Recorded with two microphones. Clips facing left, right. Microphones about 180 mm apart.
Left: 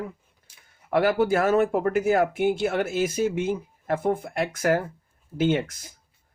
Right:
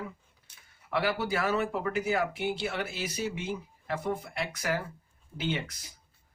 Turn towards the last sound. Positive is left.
turn(degrees=50)  # may be behind; listen again after turning